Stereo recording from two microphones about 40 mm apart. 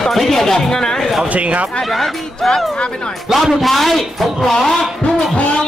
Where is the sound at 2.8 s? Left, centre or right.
Left.